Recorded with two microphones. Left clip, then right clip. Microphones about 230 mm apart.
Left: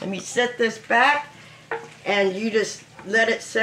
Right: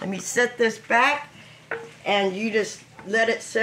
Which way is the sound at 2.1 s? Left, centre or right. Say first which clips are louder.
Left 1 dB; centre.